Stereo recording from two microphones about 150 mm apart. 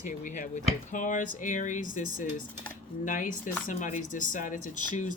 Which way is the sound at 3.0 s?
60° left (ahead or behind).